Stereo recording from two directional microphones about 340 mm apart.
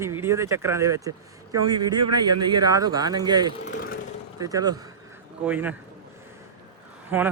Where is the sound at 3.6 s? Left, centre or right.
Left.